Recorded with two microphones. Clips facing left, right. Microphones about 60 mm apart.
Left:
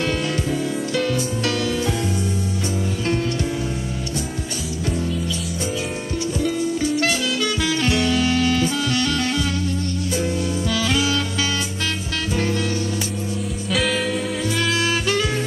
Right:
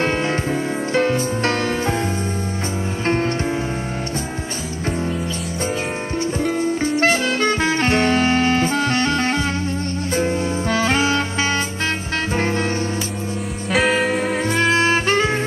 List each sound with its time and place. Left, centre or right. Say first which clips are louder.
0.0 s music: right 3 dB; right
6.4 s music: right 1 dB; right
13.7 s music: right 5 dB; right
14.4 s music: right 5 dB; right